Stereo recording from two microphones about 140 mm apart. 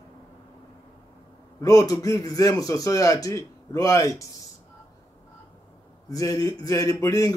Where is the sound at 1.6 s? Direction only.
25° left (ahead or behind).